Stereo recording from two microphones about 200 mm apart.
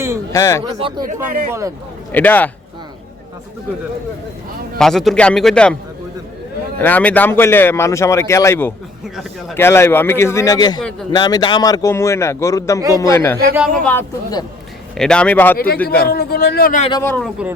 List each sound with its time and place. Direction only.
0.3 s speech: 15° left (ahead or behind)
0.8 s speech: 25° right (ahead or behind)
1.0 s speech: 45° right (ahead or behind)
2.1 s speech: 10° left (ahead or behind)
4.8 s speech: centre (ahead or behind)
6.8 s speech: 10° left (ahead or behind)
14.9 s speech: 5° left (ahead or behind)
15.5 s speech: 50° left (ahead or behind)
15.8 s speech: 5° left (ahead or behind)
16.0 s speech: 50° left (ahead or behind)
17.0 s speech: 5° left (ahead or behind)